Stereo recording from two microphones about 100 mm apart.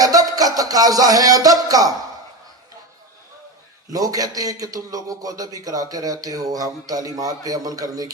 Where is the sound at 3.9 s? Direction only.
40° right (ahead or behind).